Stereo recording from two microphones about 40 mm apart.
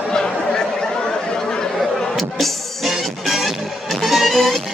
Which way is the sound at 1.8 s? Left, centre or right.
Centre.